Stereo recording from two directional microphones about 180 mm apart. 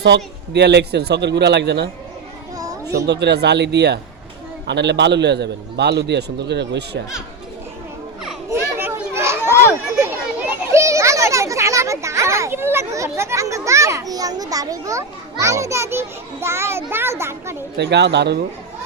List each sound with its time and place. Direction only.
0.0 s a man's voice: 70° right (ahead or behind)
2.6 s children playing: 20° right (ahead or behind)
3.1 s a man's voice: 70° right (ahead or behind)
8.4 s children playing: 15° right (ahead or behind)
10.7 s a child's voice: 15° right (ahead or behind)
17.7 s a man's voice: 70° right (ahead or behind)